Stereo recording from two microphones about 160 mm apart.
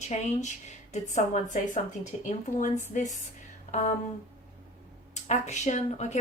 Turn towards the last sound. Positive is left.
turn(degrees=45)  # may be behind; listen again after turning